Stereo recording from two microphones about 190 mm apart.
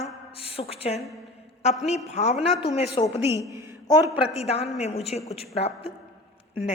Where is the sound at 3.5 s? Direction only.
15° right (ahead or behind).